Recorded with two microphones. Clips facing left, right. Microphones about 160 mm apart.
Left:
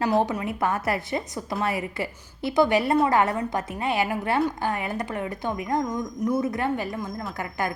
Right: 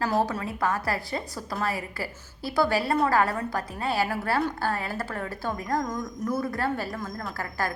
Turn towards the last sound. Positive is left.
turn(degrees=20)  # may be behind; listen again after turning